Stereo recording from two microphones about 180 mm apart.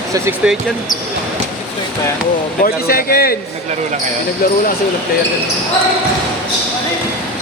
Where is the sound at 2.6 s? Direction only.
55° left (ahead or behind).